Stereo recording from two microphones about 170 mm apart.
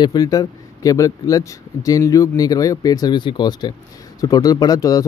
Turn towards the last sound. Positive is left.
turn(degrees=20)  # may be behind; listen again after turning